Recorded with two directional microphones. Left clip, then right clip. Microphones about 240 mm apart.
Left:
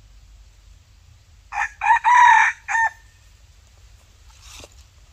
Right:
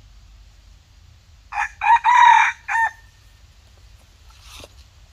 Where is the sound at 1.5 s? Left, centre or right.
Centre.